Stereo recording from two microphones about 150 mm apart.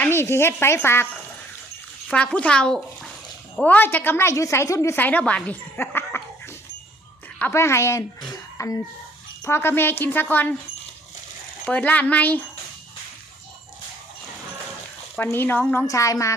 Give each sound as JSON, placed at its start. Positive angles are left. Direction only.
{"t": 0.0, "sound": "a woman's voice", "side_deg": 15}
{"t": 2.0, "sound": "a woman's voice", "side_deg": 10}
{"t": 7.3, "sound": "a woman's voice", "side_deg": 15}
{"t": 8.3, "sound": "throat clearing", "side_deg": 20}
{"t": 9.4, "sound": "a woman's voice", "side_deg": 15}
{"t": 11.6, "sound": "a woman's voice", "side_deg": 10}
{"t": 15.1, "sound": "a woman's voice", "side_deg": 15}
{"t": 15.9, "sound": "speech", "side_deg": 20}